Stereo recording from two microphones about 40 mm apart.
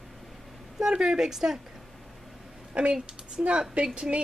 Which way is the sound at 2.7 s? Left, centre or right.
Right.